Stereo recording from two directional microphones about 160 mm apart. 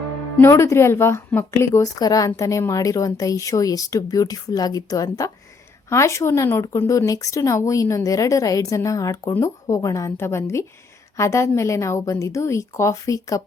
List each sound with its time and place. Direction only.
0.3 s a woman's voice: 15° left (ahead or behind)